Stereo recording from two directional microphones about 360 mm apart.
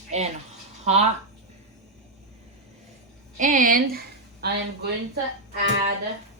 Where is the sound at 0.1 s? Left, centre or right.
Centre.